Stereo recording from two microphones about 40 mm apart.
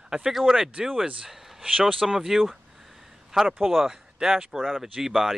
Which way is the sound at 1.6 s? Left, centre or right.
Right.